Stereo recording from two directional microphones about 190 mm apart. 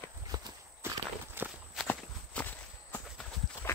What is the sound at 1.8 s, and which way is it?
Clip-clop, 10° left (ahead or behind).